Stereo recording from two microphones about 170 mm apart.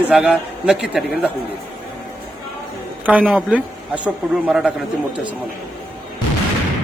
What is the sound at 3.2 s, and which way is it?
A man's voice, 5° right (ahead or behind).